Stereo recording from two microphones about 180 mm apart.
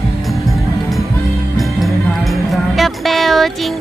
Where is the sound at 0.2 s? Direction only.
Centre (ahead or behind).